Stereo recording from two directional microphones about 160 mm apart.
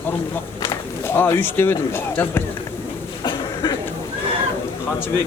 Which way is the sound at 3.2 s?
25° left (ahead or behind).